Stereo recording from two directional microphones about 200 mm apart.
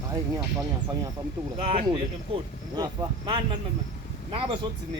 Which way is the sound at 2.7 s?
20° right (ahead or behind).